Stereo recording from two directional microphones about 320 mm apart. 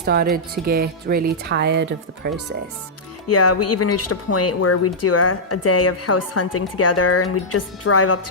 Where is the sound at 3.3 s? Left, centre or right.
Left.